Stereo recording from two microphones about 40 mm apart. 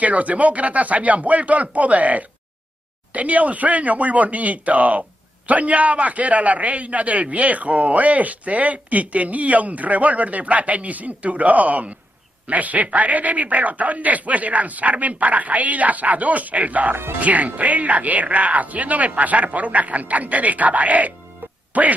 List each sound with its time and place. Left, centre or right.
0.0 s a man's voice: right